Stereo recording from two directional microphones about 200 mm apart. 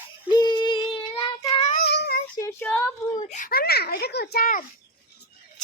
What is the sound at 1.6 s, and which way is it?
Child singing, 50° left (ahead or behind).